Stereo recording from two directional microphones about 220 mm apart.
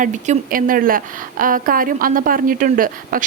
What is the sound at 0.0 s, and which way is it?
A woman's voice, 40° right (ahead or behind).